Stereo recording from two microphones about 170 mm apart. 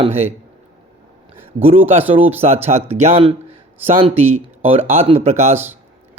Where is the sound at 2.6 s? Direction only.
40° right (ahead or behind).